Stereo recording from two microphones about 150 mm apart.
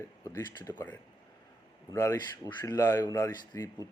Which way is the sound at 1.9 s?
25° left (ahead or behind).